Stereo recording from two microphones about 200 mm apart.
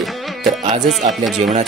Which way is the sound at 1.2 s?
Centre (ahead or behind).